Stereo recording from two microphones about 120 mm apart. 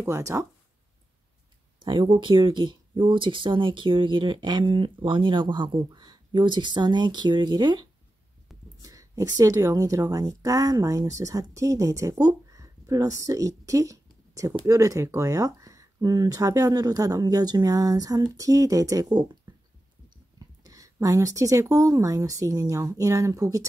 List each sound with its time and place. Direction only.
0.0 s speech: 25° right (ahead or behind)
1.8 s speech: 40° right (ahead or behind)
20.6 s speech: 30° right (ahead or behind)